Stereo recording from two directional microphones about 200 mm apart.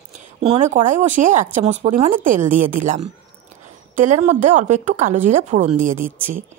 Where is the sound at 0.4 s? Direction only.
35° right (ahead or behind).